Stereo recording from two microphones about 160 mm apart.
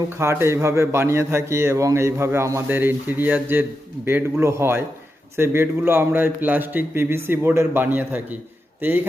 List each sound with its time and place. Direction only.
0.1 s a man's voice: 15° right (ahead or behind)